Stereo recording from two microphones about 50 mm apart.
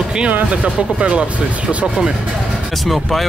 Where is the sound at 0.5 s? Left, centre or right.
Right.